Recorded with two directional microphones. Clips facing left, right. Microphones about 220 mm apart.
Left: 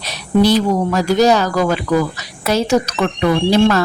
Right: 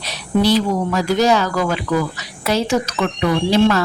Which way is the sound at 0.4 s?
45° left (ahead or behind).